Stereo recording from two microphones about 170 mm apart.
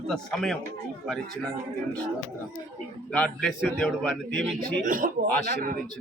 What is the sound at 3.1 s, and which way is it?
Speech, 5° left (ahead or behind).